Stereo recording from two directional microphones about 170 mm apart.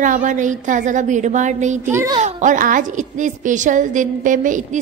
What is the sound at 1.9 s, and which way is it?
Speech, 20° right (ahead or behind).